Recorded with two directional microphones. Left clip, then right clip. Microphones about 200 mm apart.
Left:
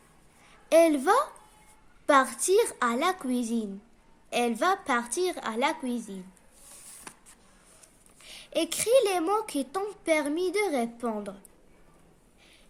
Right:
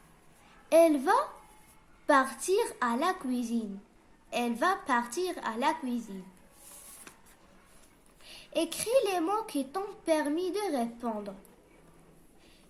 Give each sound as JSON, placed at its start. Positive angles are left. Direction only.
{"t": 0.7, "sound": "a woman's voice", "side_deg": 40}
{"t": 8.2, "sound": "a woman's voice", "side_deg": 40}